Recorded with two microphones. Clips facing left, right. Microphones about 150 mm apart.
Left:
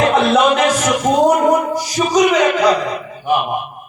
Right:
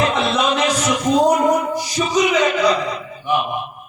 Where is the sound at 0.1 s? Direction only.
50° left (ahead or behind).